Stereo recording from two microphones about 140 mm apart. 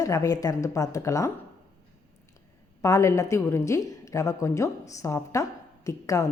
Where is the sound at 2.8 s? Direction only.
20° left (ahead or behind).